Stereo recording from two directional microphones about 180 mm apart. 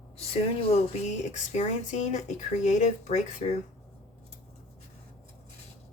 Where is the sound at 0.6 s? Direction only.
35° left (ahead or behind).